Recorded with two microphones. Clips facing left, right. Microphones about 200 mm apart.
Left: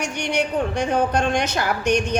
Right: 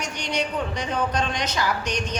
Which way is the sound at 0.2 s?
55° left (ahead or behind).